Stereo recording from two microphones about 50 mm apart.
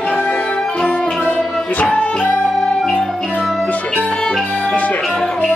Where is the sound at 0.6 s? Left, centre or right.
Centre.